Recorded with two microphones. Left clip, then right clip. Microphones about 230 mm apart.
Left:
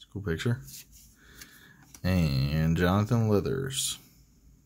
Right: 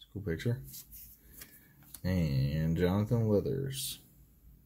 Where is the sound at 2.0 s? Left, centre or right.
Left.